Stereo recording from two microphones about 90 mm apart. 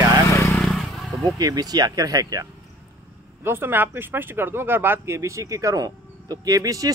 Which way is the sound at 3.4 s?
25° right (ahead or behind).